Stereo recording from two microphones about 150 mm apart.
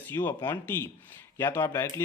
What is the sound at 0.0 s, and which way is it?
Speech, 15° left (ahead or behind).